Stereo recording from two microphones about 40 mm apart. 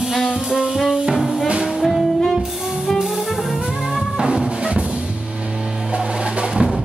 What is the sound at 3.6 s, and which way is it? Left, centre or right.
Music, centre.